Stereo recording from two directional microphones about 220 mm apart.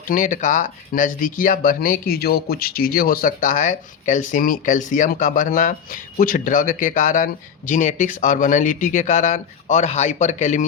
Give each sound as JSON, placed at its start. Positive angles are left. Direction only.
{"t": 0.1, "sound": "speech", "side_deg": 35}